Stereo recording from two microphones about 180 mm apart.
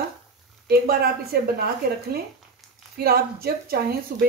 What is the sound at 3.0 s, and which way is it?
A woman's voice, 60° right (ahead or behind).